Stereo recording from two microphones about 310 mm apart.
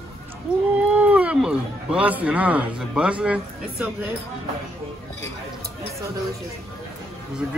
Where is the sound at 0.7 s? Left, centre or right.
Centre.